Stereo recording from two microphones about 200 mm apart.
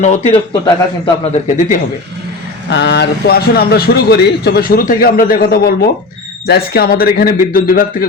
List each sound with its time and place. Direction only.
0.0 s a man's voice: 30° left (ahead or behind)
2.6 s speech: 60° left (ahead or behind); by 8.0 s 45° left (ahead or behind)